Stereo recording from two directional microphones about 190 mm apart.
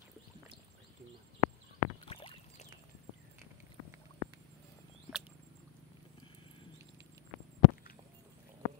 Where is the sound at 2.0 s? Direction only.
30° left (ahead or behind).